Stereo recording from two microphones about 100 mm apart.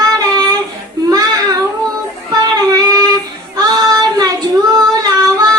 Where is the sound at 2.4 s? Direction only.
35° right (ahead or behind).